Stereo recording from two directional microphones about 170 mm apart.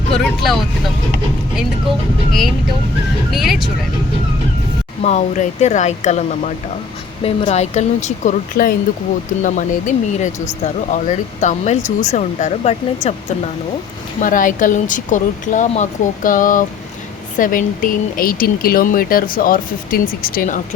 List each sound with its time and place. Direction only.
0.1 s speech: centre (ahead or behind)
3.3 s speech: centre (ahead or behind)
5.0 s speech: 45° left (ahead or behind)
14.2 s speech: 50° left (ahead or behind)